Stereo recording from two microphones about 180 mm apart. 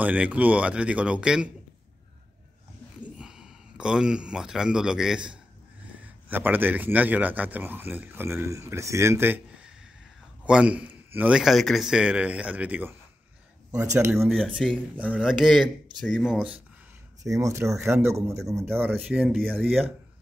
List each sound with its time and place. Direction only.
0.0 s speech: 10° right (ahead or behind)
3.2 s speech: 5° right (ahead or behind)
14.2 s speech: centre (ahead or behind)
17.2 s speech: 20° right (ahead or behind)